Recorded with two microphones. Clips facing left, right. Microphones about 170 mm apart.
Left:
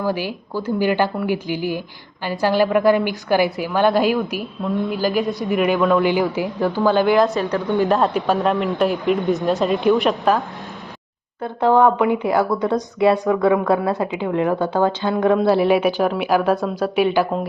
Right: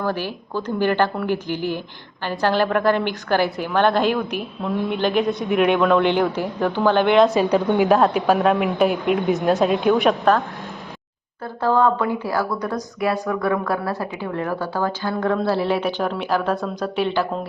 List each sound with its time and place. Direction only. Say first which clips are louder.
0.0 s a woman's voice: left 2 dB; 10° left (ahead or behind)
11.6 s a woman's voice: left 4 dB; 20° left (ahead or behind)